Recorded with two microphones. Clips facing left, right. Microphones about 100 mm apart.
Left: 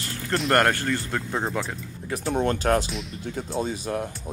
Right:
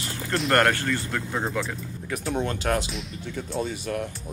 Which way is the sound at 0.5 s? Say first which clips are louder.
Even; 30° left (ahead or behind).